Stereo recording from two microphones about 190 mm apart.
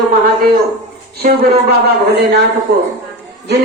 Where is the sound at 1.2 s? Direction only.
60° right (ahead or behind).